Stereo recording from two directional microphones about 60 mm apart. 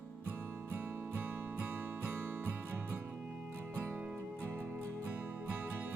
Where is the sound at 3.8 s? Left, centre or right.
Right.